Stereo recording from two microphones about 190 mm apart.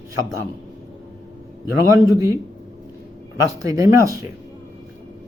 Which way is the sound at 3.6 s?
15° right (ahead or behind).